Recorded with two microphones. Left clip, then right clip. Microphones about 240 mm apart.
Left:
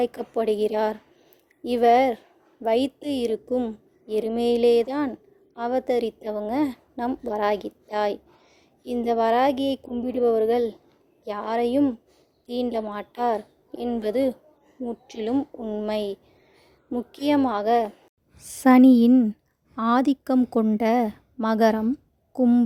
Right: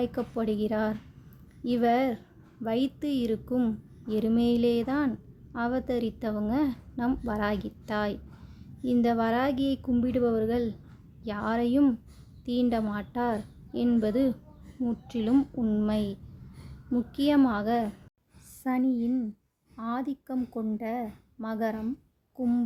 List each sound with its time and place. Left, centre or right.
0.0 s a woman's voice: left
18.4 s a woman's voice: left